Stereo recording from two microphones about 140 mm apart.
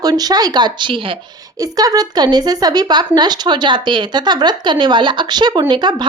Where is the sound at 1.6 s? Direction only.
25° right (ahead or behind).